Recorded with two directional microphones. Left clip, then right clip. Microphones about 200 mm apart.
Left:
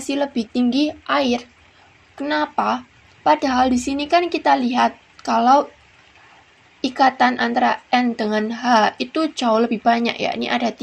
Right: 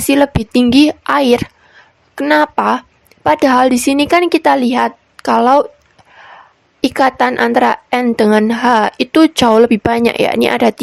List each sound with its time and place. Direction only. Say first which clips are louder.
0.1 s speech: right 10 dB; 55° right (ahead or behind)
6.8 s speech: right 4 dB; 55° right (ahead or behind)